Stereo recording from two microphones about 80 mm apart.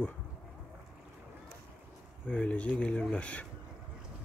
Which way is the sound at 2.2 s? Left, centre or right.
Centre.